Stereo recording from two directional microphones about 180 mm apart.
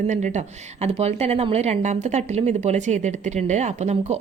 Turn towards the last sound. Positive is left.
turn(degrees=-40)  # may be behind; listen again after turning